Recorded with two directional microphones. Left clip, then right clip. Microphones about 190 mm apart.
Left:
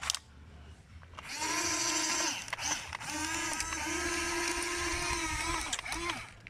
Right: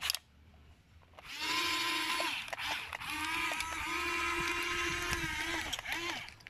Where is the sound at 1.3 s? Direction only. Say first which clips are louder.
Even; 10° left (ahead or behind).